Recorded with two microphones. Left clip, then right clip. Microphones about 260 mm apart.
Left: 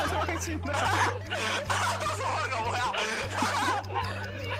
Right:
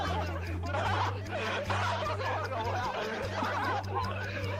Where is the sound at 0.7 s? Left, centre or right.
Left.